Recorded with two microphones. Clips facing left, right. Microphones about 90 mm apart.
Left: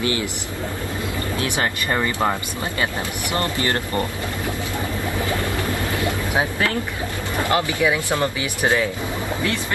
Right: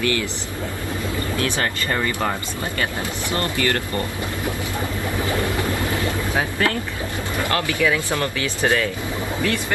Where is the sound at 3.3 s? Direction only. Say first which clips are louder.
Even; 20° left (ahead or behind).